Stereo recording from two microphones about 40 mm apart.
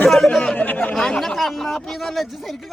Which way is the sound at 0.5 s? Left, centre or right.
Left.